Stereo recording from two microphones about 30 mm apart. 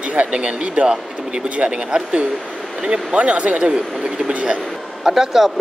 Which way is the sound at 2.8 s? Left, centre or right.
Centre.